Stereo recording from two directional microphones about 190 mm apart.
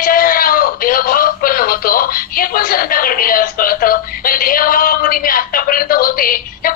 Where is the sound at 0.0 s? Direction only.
50° left (ahead or behind).